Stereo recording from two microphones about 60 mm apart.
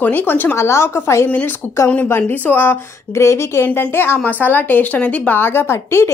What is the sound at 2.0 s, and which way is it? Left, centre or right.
Speech, left.